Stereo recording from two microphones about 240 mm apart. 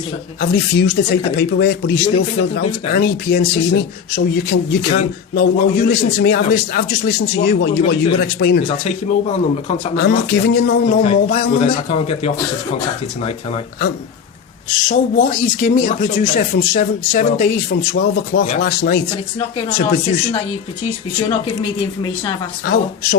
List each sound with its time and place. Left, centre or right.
0.3 s a man's voice: left
8.6 s speech: left
10.0 s speech: left
14.8 s speech: left
22.6 s speech: left